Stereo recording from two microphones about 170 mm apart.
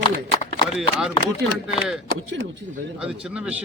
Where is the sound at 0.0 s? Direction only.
30° left (ahead or behind).